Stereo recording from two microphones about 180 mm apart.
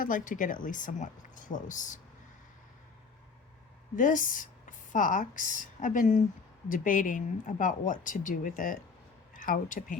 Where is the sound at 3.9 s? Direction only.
45° left (ahead or behind).